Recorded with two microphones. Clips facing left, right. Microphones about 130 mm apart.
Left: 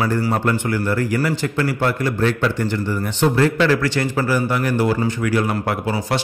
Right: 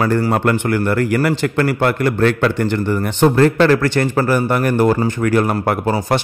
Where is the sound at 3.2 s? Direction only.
50° right (ahead or behind).